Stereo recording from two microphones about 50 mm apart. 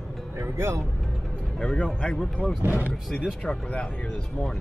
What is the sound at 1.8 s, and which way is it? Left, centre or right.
Speech, centre.